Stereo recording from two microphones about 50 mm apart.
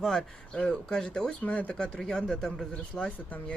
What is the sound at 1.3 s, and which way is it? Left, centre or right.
Speech, left.